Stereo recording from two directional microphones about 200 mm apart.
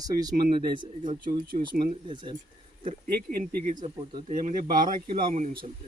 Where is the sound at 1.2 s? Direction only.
45° right (ahead or behind).